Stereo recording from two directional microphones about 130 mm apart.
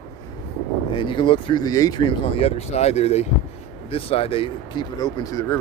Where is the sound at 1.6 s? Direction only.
30° left (ahead or behind).